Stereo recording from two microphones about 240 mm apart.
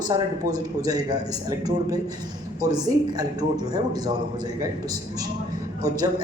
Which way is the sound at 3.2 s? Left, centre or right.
Centre.